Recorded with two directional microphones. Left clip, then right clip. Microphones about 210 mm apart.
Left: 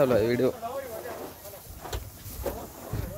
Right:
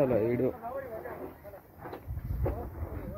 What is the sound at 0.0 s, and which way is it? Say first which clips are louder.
Speech: left 4 dB; 25° left (ahead or behind).